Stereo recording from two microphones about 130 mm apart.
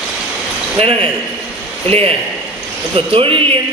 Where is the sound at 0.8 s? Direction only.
45° right (ahead or behind).